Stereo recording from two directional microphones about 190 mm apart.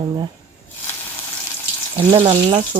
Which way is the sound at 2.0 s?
25° right (ahead or behind).